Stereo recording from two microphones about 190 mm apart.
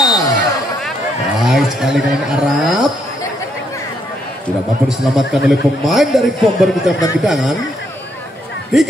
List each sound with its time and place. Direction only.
0.0 s a sound: 20° left (ahead or behind)
1.4 s speech: centre (ahead or behind)
4.8 s a man's voice: centre (ahead or behind)
8.7 s a man's voice: centre (ahead or behind)